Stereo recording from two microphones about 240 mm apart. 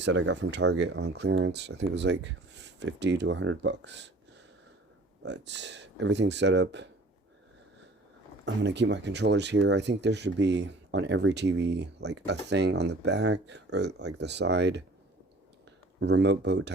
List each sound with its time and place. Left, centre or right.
0.0 s speech: right
5.2 s speech: right
8.4 s speech: right
16.0 s speech: right